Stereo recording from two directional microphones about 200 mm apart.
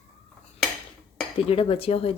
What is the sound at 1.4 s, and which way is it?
Speech, 30° left (ahead or behind).